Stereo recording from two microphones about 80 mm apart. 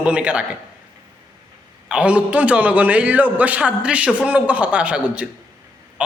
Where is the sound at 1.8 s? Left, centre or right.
Centre.